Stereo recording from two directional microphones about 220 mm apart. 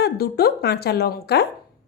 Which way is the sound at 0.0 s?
45° left (ahead or behind).